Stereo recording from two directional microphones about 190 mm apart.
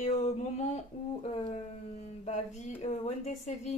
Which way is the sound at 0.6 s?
35° left (ahead or behind).